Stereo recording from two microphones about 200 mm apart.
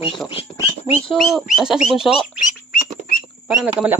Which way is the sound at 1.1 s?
Centre (ahead or behind).